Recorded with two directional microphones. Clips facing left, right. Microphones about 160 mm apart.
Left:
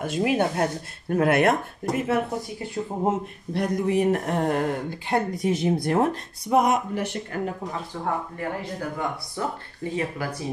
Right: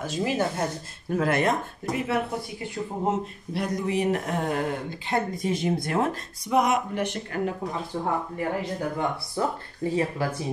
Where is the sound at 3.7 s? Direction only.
50° left (ahead or behind); by 5.5 s 70° left (ahead or behind).